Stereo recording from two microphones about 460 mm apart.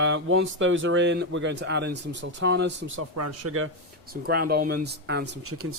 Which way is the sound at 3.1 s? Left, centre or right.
Right.